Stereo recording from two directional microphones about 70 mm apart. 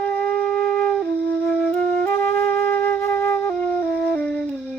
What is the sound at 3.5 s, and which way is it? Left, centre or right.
Wind instrument, centre.